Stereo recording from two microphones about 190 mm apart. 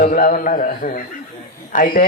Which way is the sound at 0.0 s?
50° left (ahead or behind).